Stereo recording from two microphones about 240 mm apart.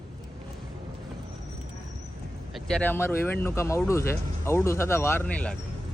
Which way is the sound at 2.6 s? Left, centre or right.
Centre.